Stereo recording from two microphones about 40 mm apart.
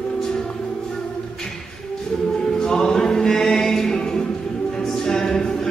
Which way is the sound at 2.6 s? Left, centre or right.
Centre.